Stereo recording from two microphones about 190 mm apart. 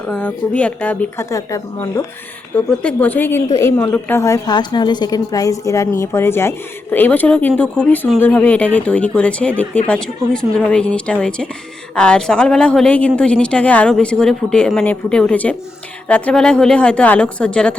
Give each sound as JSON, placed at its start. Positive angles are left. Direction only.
{"t": 0.1, "sound": "a woman's voice", "side_deg": 5}